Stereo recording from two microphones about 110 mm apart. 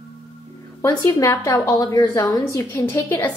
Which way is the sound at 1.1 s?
30° left (ahead or behind).